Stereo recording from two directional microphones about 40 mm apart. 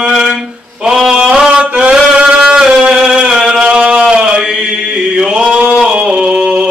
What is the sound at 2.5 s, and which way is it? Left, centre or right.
Music, centre.